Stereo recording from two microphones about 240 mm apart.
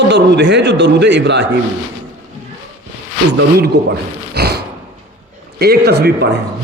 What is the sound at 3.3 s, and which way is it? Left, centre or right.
Speech, right.